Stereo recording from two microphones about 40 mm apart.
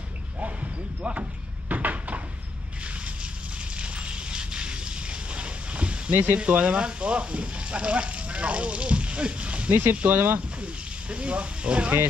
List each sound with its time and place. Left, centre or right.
1.0 s speech: right
1.7 s a sound: right
3.8 s a sound: right
6.1 s speech: right
6.5 s speech: right
11.1 s speech: right